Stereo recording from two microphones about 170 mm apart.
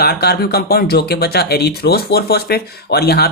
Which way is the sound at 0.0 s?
70° left (ahead or behind).